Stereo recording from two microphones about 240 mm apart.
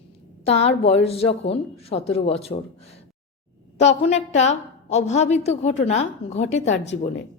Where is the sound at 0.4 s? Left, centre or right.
Left.